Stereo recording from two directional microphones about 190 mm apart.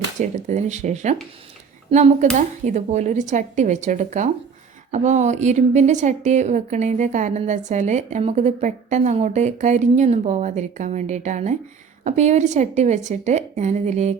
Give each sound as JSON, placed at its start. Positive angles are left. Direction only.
{"t": 0.2, "sound": "a woman's voice", "side_deg": -40}